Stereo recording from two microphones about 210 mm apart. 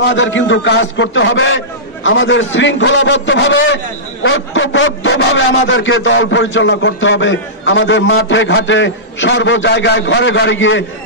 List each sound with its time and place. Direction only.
0.1 s a man's voice: 60° left (ahead or behind)